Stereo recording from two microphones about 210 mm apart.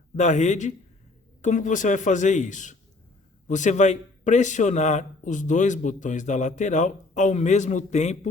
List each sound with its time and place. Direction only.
0.2 s a man's voice: 35° left (ahead or behind)